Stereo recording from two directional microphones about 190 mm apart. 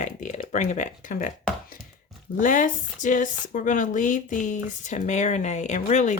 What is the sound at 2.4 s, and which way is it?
Speech, 45° left (ahead or behind).